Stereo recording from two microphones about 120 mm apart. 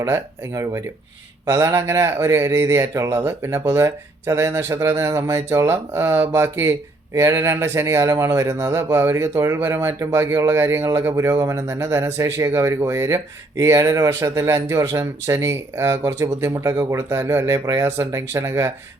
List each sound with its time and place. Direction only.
0.0 s speech: 25° right (ahead or behind)